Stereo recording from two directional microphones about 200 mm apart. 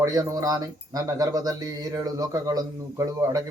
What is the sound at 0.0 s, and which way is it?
A man's voice, 15° right (ahead or behind).